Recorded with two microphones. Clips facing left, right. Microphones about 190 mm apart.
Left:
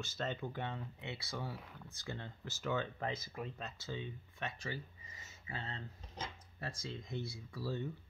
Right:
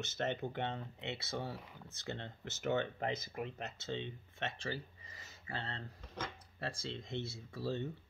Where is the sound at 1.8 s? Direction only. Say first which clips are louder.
Right 2 dB; 25° right (ahead or behind).